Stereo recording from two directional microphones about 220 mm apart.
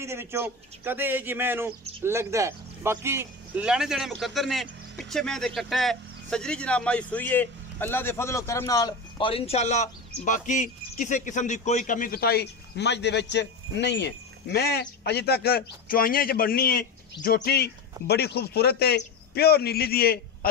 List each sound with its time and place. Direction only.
0.0 s speech: 10° right (ahead or behind); by 20.2 s 45° left (ahead or behind)